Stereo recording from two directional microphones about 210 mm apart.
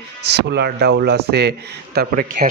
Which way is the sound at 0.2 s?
50° right (ahead or behind).